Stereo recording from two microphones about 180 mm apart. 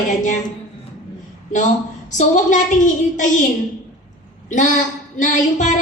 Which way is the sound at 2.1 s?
45° left (ahead or behind).